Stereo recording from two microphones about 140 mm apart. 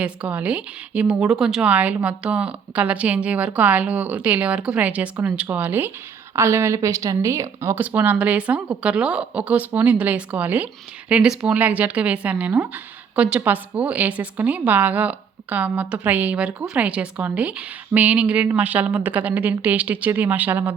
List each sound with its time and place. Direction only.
0.0 s speech: 10° right (ahead or behind)